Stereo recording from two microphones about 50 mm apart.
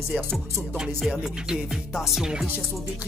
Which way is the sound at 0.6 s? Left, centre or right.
Centre.